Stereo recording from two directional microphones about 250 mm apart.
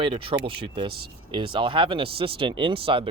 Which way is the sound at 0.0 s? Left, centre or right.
Right.